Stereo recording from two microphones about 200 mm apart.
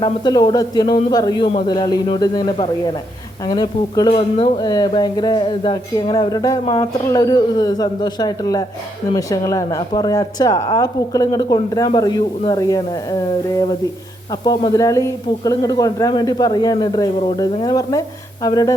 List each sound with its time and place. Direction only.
0.0 s a man's voice: 20° left (ahead or behind)